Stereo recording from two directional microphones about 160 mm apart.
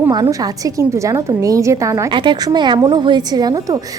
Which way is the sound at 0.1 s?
25° right (ahead or behind).